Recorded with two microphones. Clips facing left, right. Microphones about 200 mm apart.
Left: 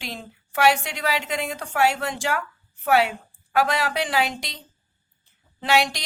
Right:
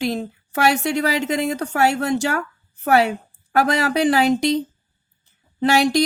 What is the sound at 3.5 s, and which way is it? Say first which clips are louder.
Speech: right 4 dB; 45° right (ahead or behind).